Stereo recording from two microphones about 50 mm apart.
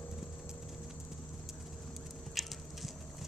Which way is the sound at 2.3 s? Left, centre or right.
Centre.